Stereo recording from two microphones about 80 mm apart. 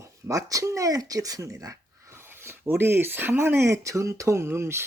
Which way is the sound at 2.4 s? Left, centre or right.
Right.